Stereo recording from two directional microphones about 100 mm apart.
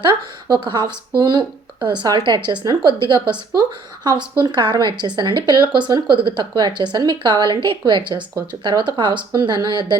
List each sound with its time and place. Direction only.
0.0 s speech: 45° right (ahead or behind)